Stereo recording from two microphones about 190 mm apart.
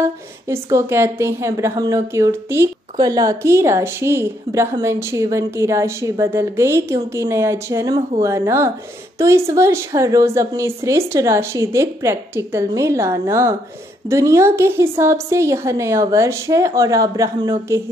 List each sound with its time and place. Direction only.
0.0 s a woman's voice: 15° right (ahead or behind)